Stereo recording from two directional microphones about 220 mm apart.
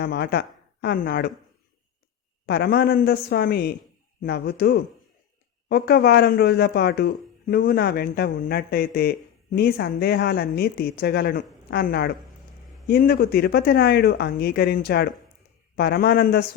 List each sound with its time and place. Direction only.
0.0 s speech: 45° left (ahead or behind)
2.5 s speech: 45° left (ahead or behind)